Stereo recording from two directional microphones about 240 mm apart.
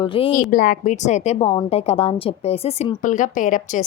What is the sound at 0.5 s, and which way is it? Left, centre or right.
Speech, left.